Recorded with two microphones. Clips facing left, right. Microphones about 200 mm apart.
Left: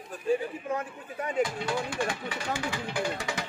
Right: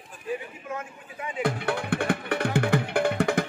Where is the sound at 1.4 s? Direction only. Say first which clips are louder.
Right 2 dB; 60° right (ahead or behind).